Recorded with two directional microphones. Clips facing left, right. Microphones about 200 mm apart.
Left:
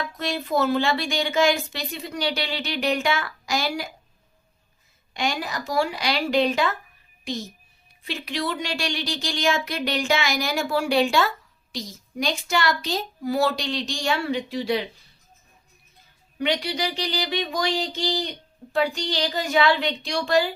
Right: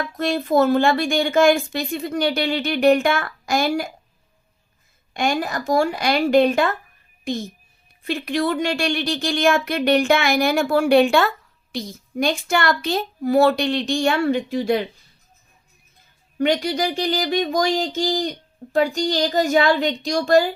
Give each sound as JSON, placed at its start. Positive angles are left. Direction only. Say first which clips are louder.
{"t": 0.0, "sound": "speech", "louder": "right 6 dB", "side_deg": -50}
{"t": 5.1, "sound": "speech", "louder": "right 5 dB", "side_deg": -50}
{"t": 8.0, "sound": "speech", "louder": "right 7 dB", "side_deg": -50}
{"t": 16.4, "sound": "speech", "louder": "right 5 dB", "side_deg": -45}